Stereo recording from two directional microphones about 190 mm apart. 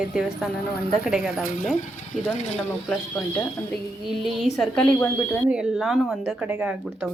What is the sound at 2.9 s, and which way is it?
Speech, 5° left (ahead or behind).